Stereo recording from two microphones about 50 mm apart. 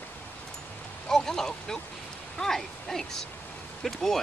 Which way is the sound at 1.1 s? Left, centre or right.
Centre.